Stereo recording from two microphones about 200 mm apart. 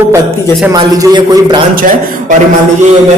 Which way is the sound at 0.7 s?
20° right (ahead or behind).